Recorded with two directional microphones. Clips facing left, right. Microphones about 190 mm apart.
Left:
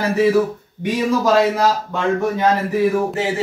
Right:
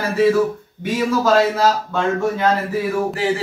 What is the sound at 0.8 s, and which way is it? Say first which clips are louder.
A man's voice: even; 15° left (ahead or behind).